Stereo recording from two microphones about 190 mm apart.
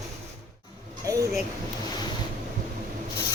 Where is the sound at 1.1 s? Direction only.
15° right (ahead or behind).